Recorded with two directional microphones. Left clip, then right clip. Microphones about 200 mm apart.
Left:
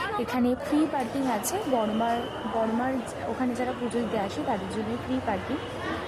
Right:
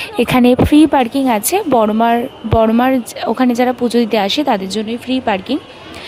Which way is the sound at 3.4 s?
45° right (ahead or behind).